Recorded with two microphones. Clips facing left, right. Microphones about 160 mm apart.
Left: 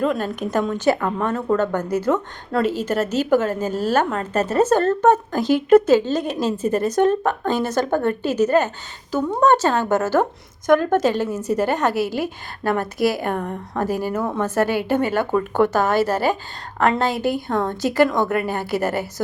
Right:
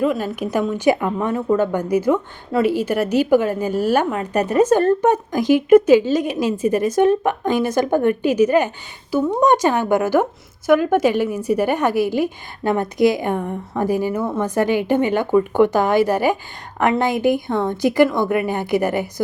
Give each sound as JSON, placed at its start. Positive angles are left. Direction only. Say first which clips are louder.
{"t": 0.0, "sound": "a woman's voice", "louder": "right 2 dB", "side_deg": -10}